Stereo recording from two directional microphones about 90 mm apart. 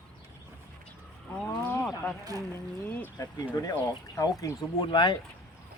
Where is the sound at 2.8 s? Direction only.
20° left (ahead or behind).